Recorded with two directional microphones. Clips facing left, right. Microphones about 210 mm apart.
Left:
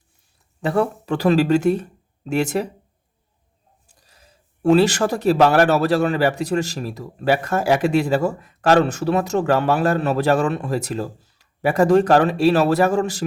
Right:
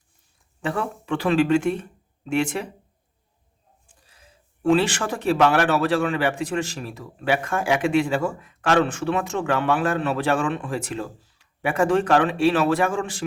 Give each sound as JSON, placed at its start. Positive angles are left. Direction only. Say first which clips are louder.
{"t": 0.6, "sound": "speech", "louder": "left 7 dB", "side_deg": 40}
{"t": 3.8, "sound": "speech", "louder": "left 1 dB", "side_deg": 40}